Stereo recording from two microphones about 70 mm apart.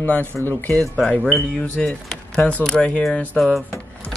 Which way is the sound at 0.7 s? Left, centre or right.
Centre.